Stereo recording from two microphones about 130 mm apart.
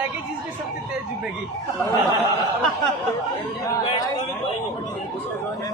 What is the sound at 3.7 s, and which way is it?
Speech, 25° left (ahead or behind).